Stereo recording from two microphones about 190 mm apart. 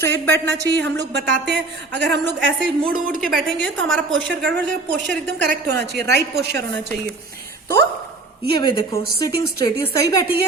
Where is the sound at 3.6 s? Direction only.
75° right (ahead or behind).